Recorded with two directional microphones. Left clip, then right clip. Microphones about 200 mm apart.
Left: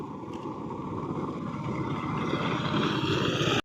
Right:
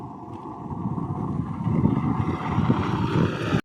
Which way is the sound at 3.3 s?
20° left (ahead or behind).